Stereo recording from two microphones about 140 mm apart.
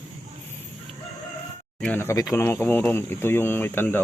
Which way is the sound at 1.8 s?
15° left (ahead or behind).